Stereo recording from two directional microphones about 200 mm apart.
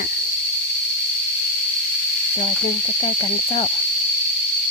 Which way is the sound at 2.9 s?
25° left (ahead or behind).